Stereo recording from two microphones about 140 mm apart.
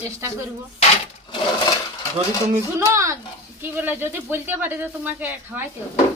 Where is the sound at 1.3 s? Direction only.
30° left (ahead or behind).